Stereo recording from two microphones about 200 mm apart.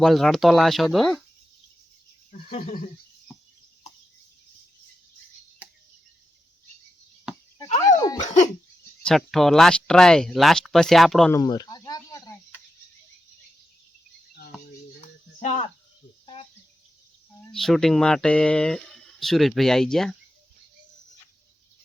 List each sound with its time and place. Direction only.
0.0 s speech: centre (ahead or behind)
2.6 s speech: 40° left (ahead or behind)
3.9 s chicken: 35° left (ahead or behind)
7.9 s dog: 20° left (ahead or behind)
9.0 s speech: centre (ahead or behind)
11.3 s a sound: 20° left (ahead or behind)
15.4 s speech: 35° left (ahead or behind)
16.2 s cricket: 25° left (ahead or behind)
17.5 s speech: centre (ahead or behind)